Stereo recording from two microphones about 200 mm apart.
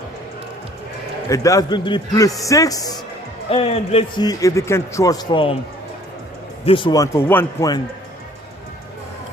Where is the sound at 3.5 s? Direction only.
30° left (ahead or behind).